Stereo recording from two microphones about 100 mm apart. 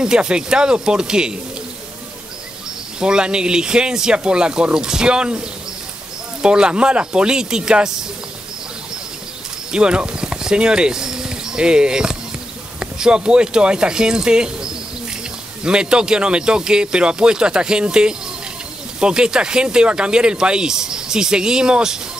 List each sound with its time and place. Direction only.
0.0 s speech: 10° right (ahead or behind)
3.0 s speech: 10° right (ahead or behind)
6.4 s speech: 10° right (ahead or behind)
9.7 s speech: 10° right (ahead or behind)